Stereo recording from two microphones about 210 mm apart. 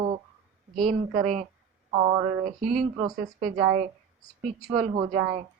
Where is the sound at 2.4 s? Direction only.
35° right (ahead or behind).